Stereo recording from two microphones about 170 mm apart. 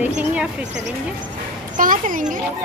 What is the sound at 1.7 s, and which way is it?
Speech, 50° right (ahead or behind).